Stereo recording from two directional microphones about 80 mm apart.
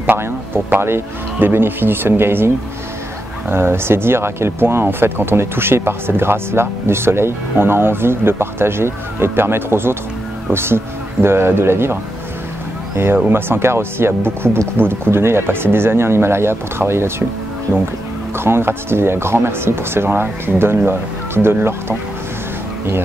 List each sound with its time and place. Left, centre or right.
0.0 s speech: right
18.4 s speech: right